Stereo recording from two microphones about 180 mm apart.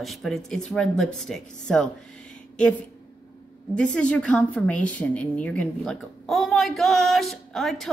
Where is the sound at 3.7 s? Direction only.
5° left (ahead or behind).